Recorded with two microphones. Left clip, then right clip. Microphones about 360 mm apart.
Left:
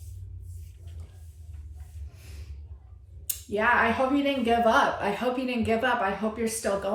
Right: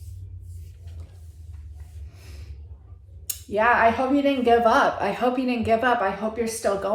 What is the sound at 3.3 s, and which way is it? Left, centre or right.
Speech, centre.